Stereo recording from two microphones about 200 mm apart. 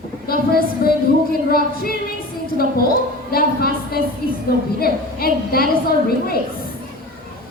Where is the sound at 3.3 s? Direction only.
50° left (ahead or behind).